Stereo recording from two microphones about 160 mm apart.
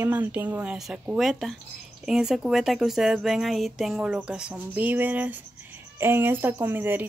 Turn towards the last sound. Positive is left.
turn(degrees=-10)  # may be behind; listen again after turning